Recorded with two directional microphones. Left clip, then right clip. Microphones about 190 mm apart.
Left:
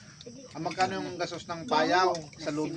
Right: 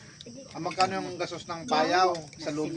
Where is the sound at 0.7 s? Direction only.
10° right (ahead or behind).